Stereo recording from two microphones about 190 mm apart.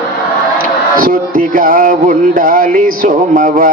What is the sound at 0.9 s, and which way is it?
Speech, 50° right (ahead or behind).